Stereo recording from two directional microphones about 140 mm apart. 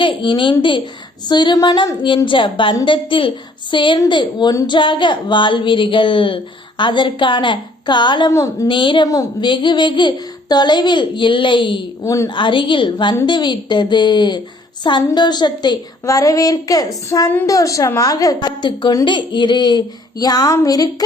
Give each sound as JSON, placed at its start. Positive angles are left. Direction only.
{"t": 0.0, "sound": "speech", "side_deg": 35}
{"t": 8.3, "sound": "speech", "side_deg": 25}
{"t": 12.0, "sound": "a woman's voice", "side_deg": 20}
{"t": 12.3, "sound": "a woman's voice", "side_deg": 35}